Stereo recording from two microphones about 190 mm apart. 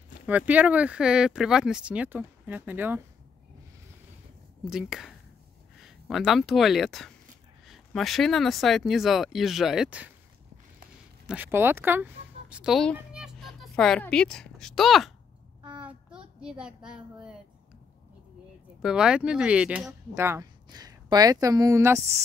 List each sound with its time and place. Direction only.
0.3 s speech: 10° right (ahead or behind)
4.6 s speech: 5° right (ahead or behind)
11.2 s speech: 10° right (ahead or behind)
15.8 s child singing: 5° right (ahead or behind)
16.3 s speech: 5° right (ahead or behind)
18.8 s a woman's voice: 5° right (ahead or behind)